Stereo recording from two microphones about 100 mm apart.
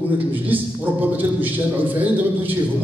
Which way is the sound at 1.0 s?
20° right (ahead or behind).